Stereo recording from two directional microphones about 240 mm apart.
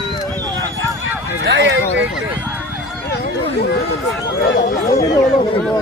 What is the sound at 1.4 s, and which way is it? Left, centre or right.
Speech, right.